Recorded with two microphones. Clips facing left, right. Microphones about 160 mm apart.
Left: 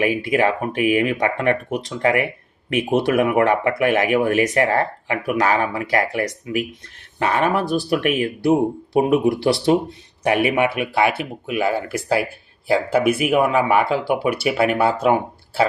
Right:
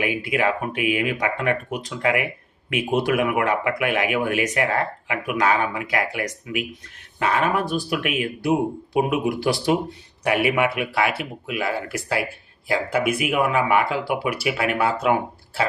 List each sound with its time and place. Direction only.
0.0 s speech: 35° left (ahead or behind)
13.1 s speech: 30° left (ahead or behind)